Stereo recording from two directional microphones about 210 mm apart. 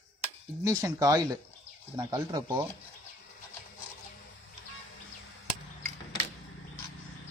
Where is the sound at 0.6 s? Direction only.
15° right (ahead or behind).